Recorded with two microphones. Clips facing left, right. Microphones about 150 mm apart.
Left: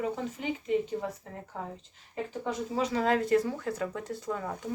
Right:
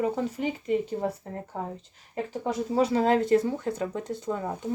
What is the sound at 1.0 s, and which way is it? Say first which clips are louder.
Speech: right 6 dB; 35° right (ahead or behind).